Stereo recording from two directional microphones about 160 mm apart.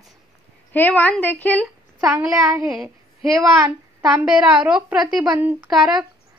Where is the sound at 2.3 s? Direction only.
20° right (ahead or behind).